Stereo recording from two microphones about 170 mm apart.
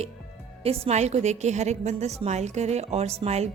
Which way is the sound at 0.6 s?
40° right (ahead or behind).